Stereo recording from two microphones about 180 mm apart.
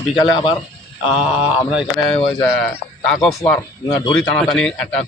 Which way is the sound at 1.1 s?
5° right (ahead or behind).